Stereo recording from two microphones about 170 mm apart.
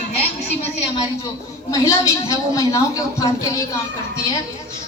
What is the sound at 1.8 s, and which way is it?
A woman's voice, 20° left (ahead or behind).